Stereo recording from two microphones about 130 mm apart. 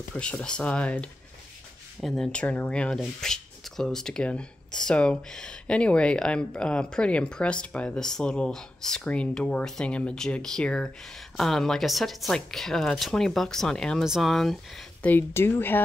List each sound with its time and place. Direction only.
0.1 s speech: 10° left (ahead or behind)
15.0 s speech: 15° left (ahead or behind)